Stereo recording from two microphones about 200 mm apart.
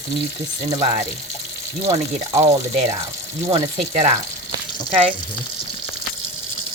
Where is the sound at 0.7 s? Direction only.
25° right (ahead or behind).